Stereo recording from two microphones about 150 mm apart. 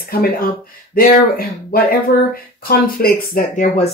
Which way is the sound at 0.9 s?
75° left (ahead or behind).